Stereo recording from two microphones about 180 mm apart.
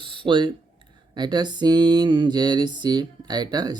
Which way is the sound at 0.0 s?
25° right (ahead or behind).